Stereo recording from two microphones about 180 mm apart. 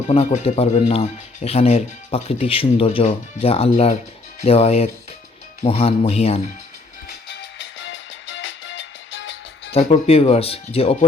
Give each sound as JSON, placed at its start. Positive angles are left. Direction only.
{"t": 0.1, "sound": "speech", "side_deg": 40}
{"t": 7.3, "sound": "music", "side_deg": 85}
{"t": 9.7, "sound": "speech", "side_deg": 35}